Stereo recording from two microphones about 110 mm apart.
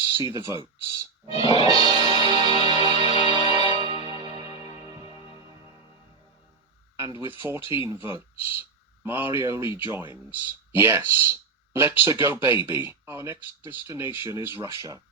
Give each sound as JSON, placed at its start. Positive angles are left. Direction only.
{"t": 0.2, "sound": "speech", "side_deg": -25}
{"t": 1.5, "sound": "music", "side_deg": -40}
{"t": 6.9, "sound": "speech", "side_deg": -25}